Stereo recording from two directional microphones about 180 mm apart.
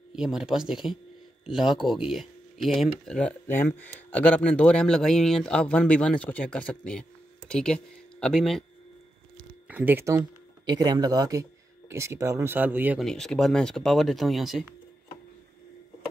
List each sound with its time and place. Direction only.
0.1 s speech: 5° right (ahead or behind)
9.7 s speech: 10° right (ahead or behind)
13.0 s speech: centre (ahead or behind)